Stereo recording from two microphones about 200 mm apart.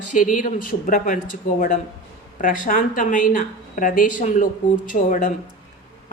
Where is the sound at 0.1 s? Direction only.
40° left (ahead or behind).